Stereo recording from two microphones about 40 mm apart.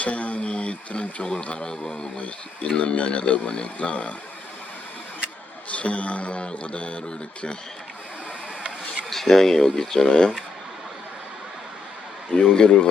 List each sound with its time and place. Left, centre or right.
0.0 s speech: left
5.7 s speech: left
9.0 s speech: centre
12.3 s speech: left